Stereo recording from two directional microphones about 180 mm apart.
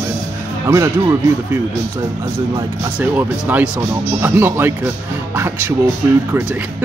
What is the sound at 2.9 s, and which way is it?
Speech, 10° right (ahead or behind).